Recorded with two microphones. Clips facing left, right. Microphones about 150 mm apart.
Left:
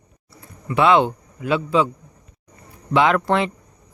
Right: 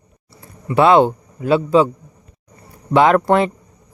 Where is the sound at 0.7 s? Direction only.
40° right (ahead or behind).